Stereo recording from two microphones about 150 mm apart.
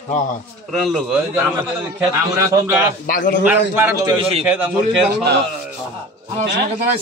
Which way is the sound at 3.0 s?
65° left (ahead or behind).